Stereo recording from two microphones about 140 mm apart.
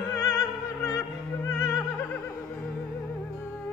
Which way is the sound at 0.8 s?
20° left (ahead or behind).